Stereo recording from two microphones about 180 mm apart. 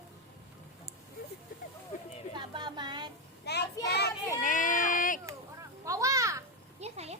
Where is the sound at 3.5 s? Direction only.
65° left (ahead or behind).